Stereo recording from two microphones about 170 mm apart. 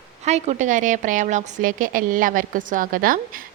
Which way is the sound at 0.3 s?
40° right (ahead or behind).